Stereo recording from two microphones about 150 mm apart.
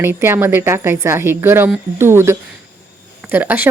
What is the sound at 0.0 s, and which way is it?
Speech, 15° right (ahead or behind).